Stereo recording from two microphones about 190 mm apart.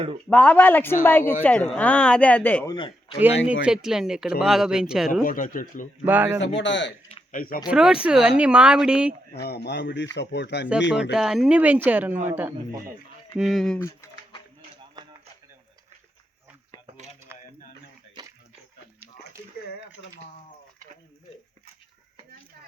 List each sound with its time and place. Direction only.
0.3 s speech: 5° left (ahead or behind)
2.7 s a man's voice: 25° left (ahead or behind)
3.2 s speech: 10° right (ahead or behind)
5.2 s speech: 45° left (ahead or behind)
6.1 s speech: 10° right (ahead or behind)
6.6 s speech: 70° left (ahead or behind)
7.3 s speech: 50° left (ahead or behind)
7.7 s speech: 5° right (ahead or behind)
9.3 s speech: 60° left (ahead or behind)
11.1 s speech: 5° right (ahead or behind)
13.4 s speech: centre (ahead or behind)
13.8 s typing: 15° left (ahead or behind)
17.3 s a sound: 10° right (ahead or behind)